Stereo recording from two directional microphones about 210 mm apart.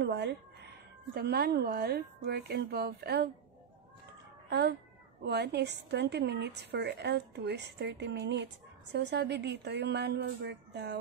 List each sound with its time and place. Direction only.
0.0 s speech: 55° right (ahead or behind)
4.5 s a woman's voice: 50° right (ahead or behind)